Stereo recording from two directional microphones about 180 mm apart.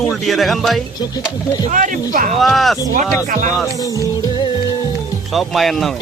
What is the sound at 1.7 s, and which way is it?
Speech, 45° right (ahead or behind).